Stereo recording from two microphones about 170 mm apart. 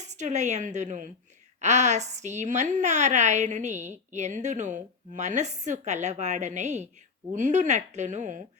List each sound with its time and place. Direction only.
0.0 s a woman's voice: 45° right (ahead or behind)